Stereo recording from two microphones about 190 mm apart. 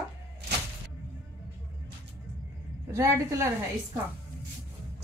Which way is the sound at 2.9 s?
15° right (ahead or behind).